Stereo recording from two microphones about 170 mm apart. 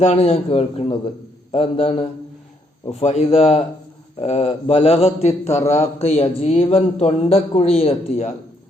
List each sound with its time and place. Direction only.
0.0 s a man's voice: 40° left (ahead or behind)
5.5 s speech: 15° left (ahead or behind)
6.0 s a man's voice: 35° left (ahead or behind)